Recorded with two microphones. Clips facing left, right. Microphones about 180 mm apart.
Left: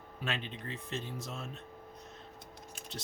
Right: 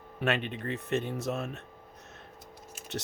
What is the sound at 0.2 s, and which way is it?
Speech, 65° right (ahead or behind).